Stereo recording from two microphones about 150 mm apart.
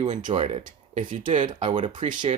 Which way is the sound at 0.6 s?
60° right (ahead or behind).